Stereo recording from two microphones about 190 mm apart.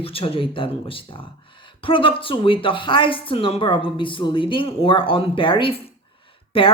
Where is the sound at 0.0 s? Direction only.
30° left (ahead or behind).